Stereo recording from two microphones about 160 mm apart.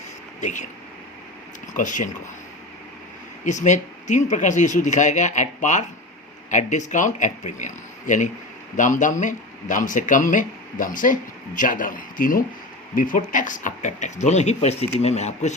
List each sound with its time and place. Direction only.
1.7 s speech: 55° left (ahead or behind)
3.4 s speech: 50° left (ahead or behind)